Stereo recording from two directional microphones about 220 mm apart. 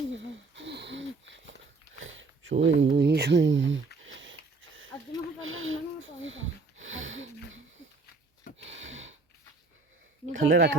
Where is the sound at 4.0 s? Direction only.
60° right (ahead or behind).